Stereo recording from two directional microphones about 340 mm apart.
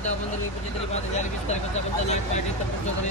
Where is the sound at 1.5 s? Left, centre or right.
Centre.